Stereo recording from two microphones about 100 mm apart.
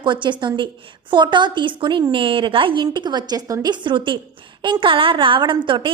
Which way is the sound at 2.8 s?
45° right (ahead or behind).